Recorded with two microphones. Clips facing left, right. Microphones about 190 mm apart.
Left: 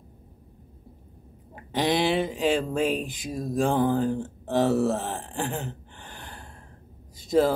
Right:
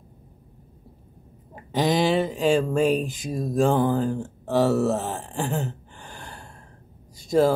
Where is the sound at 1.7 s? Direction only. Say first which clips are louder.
Right 2 dB; 45° right (ahead or behind).